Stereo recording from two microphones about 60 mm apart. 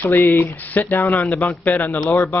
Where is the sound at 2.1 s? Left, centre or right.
Left.